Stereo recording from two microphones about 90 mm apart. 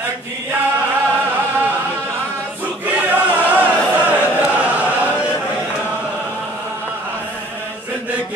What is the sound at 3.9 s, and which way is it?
Choir, 20° right (ahead or behind).